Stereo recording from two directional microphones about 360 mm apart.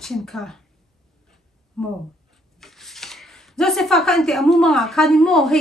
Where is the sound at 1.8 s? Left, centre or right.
Centre.